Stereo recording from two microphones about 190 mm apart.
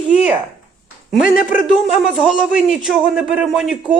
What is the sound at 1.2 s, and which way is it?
Speech, 50° left (ahead or behind).